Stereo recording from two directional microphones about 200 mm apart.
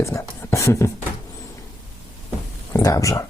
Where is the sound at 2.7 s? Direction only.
15° left (ahead or behind).